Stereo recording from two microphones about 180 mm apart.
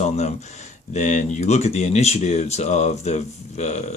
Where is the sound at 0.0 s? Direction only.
40° left (ahead or behind).